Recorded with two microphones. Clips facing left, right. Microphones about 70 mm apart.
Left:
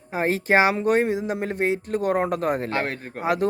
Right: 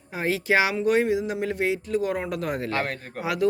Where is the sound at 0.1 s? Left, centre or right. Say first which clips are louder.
Left 3 dB; left.